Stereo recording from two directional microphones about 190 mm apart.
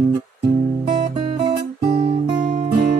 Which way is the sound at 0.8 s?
25° right (ahead or behind).